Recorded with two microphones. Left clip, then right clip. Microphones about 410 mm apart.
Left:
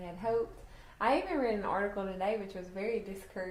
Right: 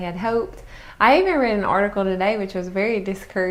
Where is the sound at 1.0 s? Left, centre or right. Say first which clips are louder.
Right 15 dB; right.